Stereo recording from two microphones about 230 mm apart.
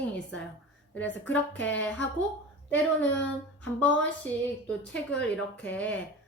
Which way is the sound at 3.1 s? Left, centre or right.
Left.